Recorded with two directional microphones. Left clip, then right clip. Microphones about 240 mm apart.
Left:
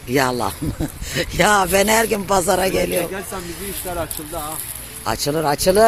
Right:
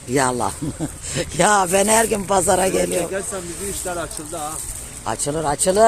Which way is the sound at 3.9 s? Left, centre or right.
Left.